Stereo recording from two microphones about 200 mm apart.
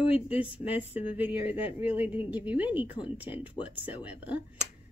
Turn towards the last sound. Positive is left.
turn(degrees=-5)  # may be behind; listen again after turning